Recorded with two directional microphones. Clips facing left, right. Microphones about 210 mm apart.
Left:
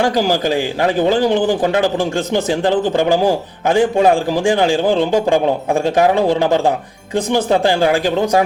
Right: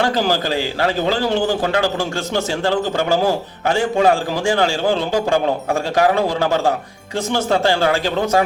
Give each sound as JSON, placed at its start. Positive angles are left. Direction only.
{"t": 0.0, "sound": "a man's voice", "side_deg": 15}